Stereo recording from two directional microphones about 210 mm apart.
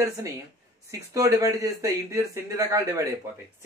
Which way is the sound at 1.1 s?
15° right (ahead or behind).